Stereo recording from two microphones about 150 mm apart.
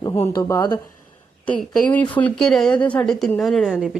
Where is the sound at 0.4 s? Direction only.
20° left (ahead or behind).